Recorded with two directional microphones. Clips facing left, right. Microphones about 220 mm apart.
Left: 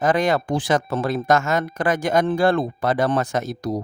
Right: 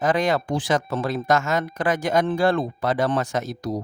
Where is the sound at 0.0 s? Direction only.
50° left (ahead or behind).